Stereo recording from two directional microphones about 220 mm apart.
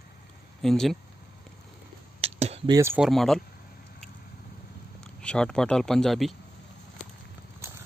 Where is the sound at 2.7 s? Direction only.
10° right (ahead or behind).